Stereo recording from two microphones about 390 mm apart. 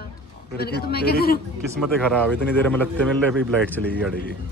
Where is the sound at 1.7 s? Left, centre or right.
Centre.